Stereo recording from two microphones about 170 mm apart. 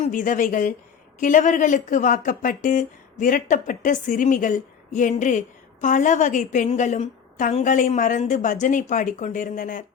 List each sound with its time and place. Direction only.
0.0 s a woman's voice: 50° left (ahead or behind)